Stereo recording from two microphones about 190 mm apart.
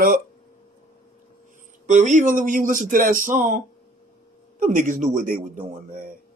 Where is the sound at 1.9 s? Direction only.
40° right (ahead or behind).